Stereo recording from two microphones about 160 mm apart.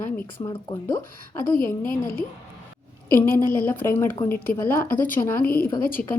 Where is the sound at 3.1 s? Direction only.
15° left (ahead or behind).